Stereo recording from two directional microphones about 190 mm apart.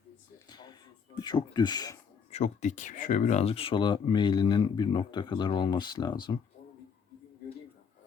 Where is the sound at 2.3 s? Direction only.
40° left (ahead or behind); by 6.3 s 25° left (ahead or behind).